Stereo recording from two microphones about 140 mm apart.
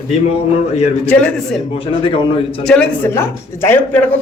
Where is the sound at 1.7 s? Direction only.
40° left (ahead or behind).